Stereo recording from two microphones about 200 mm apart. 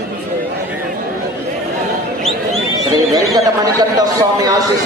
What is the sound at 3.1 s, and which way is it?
Speech, 20° right (ahead or behind).